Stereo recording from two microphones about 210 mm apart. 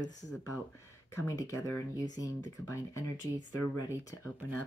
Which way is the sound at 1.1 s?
15° left (ahead or behind).